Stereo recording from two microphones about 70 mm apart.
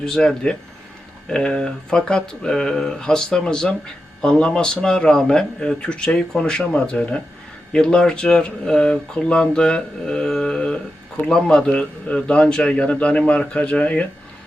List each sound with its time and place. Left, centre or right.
0.0 s speech: centre